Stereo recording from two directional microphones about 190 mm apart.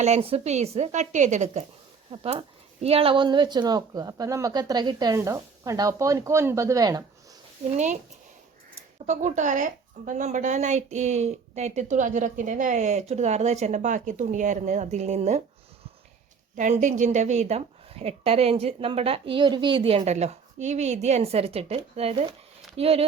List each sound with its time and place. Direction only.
0.0 s a woman's voice: 30° right (ahead or behind)
9.0 s a woman's voice: 40° right (ahead or behind)
16.6 s a woman's voice: 40° right (ahead or behind)